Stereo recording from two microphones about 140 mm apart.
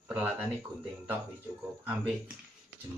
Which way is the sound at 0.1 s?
10° right (ahead or behind).